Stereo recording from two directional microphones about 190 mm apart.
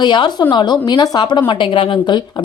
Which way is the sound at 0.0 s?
25° left (ahead or behind).